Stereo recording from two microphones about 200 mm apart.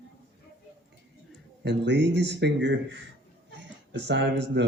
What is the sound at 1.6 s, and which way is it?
Speech, 60° right (ahead or behind).